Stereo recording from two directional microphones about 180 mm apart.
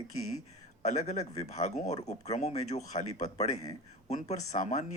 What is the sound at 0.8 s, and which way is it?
Speech, 40° left (ahead or behind).